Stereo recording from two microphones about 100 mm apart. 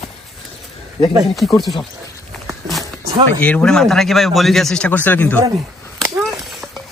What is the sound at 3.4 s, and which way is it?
Speech, 10° left (ahead or behind).